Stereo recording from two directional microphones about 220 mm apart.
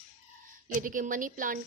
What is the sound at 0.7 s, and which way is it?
Speech, 35° right (ahead or behind).